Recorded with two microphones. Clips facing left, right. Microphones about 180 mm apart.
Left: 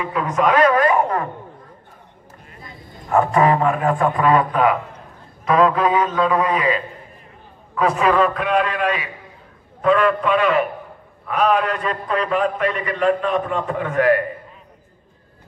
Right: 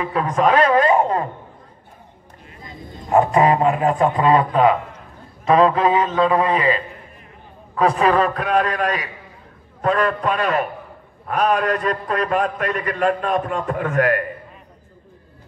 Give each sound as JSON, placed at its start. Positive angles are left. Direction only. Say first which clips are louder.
{"t": 0.0, "sound": "a man's voice", "louder": "right 1 dB", "side_deg": -35}
{"t": 3.1, "sound": "a man's voice", "louder": "right 1 dB", "side_deg": -20}